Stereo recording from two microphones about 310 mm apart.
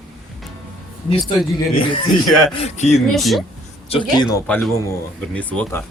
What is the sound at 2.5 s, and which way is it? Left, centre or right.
Speech, left.